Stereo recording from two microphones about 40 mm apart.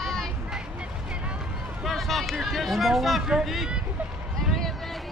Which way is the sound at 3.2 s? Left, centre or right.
Centre.